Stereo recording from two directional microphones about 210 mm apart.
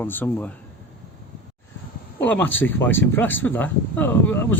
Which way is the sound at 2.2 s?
5° left (ahead or behind).